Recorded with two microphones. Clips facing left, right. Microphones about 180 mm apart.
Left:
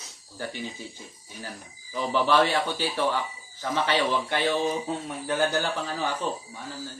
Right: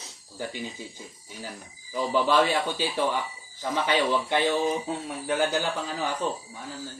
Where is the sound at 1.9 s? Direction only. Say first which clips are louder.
Even; 15° right (ahead or behind).